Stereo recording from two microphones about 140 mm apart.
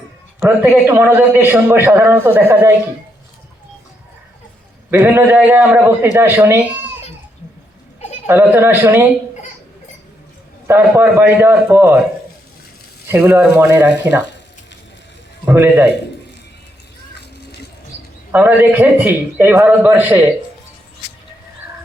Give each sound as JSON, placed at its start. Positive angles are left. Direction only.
{"t": 0.3, "sound": "a man's voice", "side_deg": -15}
{"t": 4.9, "sound": "a man's voice", "side_deg": -15}
{"t": 8.3, "sound": "a man's voice", "side_deg": -15}
{"t": 10.7, "sound": "a man's voice", "side_deg": -15}
{"t": 13.1, "sound": "a man's voice", "side_deg": -15}
{"t": 15.4, "sound": "a man's voice", "side_deg": -15}
{"t": 18.3, "sound": "a man's voice", "side_deg": -10}